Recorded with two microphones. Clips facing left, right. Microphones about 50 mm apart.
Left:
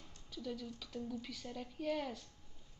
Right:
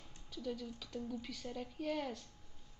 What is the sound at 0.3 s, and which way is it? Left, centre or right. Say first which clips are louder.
Speech: right 1 dB; centre.